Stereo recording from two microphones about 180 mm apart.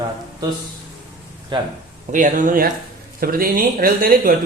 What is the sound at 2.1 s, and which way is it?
Speech, 45° right (ahead or behind).